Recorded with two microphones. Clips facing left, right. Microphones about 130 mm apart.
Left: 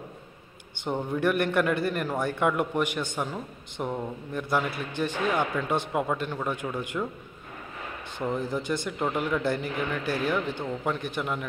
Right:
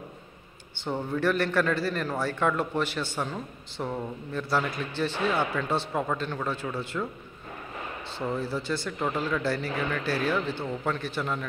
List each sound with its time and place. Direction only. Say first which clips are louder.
0.8 s a man's voice: left 1 dB; 15° left (ahead or behind)
8.2 s a man's voice: left 1 dB; 15° left (ahead or behind)